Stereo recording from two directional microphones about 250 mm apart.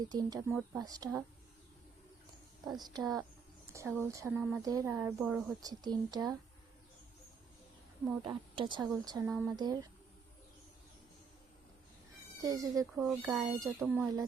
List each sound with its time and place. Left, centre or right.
0.1 s speech: centre
2.6 s speech: centre
8.2 s speech: centre
12.4 s speech: centre
13.1 s speech: centre